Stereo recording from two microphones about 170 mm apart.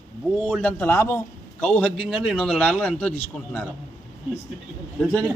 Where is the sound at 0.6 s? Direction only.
10° left (ahead or behind).